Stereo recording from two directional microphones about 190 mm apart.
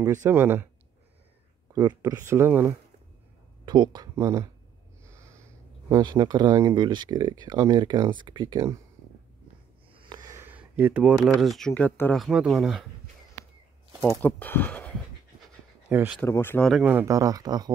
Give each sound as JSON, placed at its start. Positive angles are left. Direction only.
{"t": 0.0, "sound": "speech", "side_deg": -15}
{"t": 1.7, "sound": "speech", "side_deg": -20}
{"t": 3.6, "sound": "speech", "side_deg": -25}
{"t": 10.0, "sound": "speech", "side_deg": -20}
{"t": 14.2, "sound": "speech", "side_deg": 10}
{"t": 15.9, "sound": "speech", "side_deg": -10}
{"t": 16.2, "sound": "speech", "side_deg": 10}
{"t": 16.7, "sound": "speech", "side_deg": -10}